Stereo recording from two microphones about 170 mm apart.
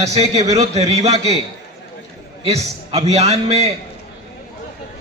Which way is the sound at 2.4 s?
40° right (ahead or behind).